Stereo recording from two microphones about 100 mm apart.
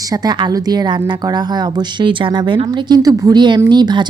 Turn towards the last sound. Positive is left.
turn(degrees=-50)  # may be behind; listen again after turning